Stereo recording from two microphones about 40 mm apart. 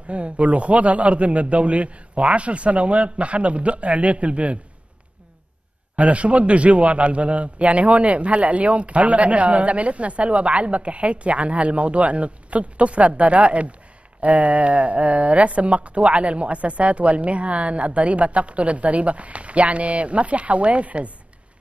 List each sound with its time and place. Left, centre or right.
0.1 s a man's voice: right
5.9 s a man's voice: right